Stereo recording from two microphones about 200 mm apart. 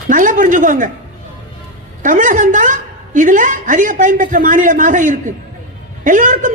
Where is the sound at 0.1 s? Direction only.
40° right (ahead or behind).